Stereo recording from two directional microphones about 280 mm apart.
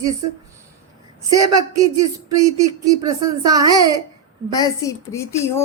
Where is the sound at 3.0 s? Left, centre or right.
Centre.